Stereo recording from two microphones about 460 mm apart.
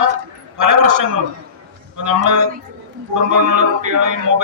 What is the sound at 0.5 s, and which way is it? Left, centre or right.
A man's voice, right.